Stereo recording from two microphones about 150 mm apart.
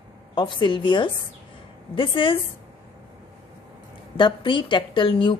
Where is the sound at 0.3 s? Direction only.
30° left (ahead or behind).